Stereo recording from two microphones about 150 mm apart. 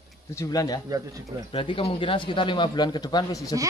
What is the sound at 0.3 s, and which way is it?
Speech, 20° left (ahead or behind).